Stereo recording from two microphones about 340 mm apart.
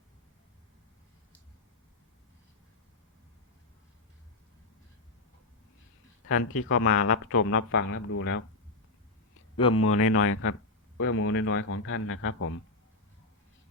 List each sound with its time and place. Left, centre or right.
6.2 s speech: left
9.7 s speech: left